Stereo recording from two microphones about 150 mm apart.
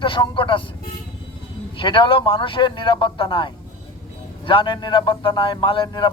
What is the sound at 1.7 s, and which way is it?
A man's voice, 35° left (ahead or behind).